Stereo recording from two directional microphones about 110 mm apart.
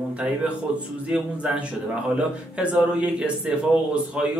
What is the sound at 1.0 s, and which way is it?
A man's voice, 10° right (ahead or behind).